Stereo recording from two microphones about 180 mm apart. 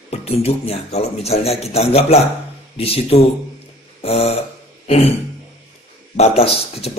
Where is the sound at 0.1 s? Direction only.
35° left (ahead or behind).